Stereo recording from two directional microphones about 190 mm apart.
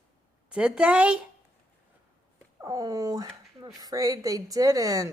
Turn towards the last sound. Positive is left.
turn(degrees=-20)  # may be behind; listen again after turning